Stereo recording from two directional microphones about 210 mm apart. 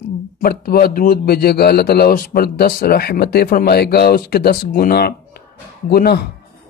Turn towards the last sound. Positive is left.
turn(degrees=50)  # may be behind; listen again after turning